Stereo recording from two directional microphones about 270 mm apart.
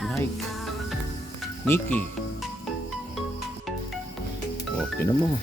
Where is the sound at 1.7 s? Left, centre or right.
Centre.